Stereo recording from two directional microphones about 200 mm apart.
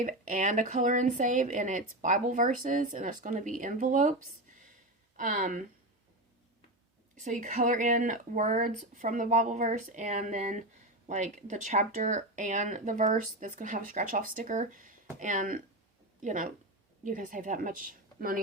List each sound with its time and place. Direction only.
0.0 s speech: 40° right (ahead or behind)
5.1 s speech: 40° right (ahead or behind)
7.2 s a woman's voice: 40° right (ahead or behind)